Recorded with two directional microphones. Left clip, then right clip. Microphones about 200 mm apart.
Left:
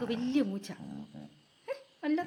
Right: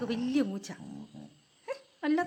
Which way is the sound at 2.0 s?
15° right (ahead or behind).